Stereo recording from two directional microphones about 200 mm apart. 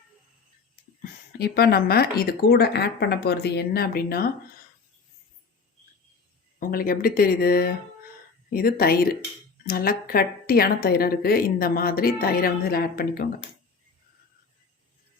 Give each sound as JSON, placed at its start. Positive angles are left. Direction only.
{"t": 1.4, "sound": "a woman's voice", "side_deg": 50}
{"t": 6.6, "sound": "a woman's voice", "side_deg": 45}